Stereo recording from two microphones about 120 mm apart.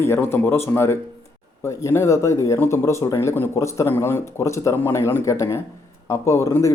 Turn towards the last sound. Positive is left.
turn(degrees=25)  # may be behind; listen again after turning